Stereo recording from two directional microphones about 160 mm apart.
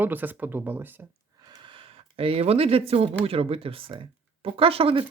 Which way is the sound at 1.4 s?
30° right (ahead or behind).